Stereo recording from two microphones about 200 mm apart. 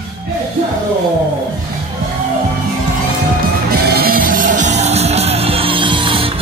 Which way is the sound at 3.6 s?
50° right (ahead or behind).